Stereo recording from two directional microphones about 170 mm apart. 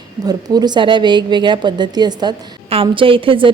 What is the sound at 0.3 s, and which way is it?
A woman's voice, 25° right (ahead or behind).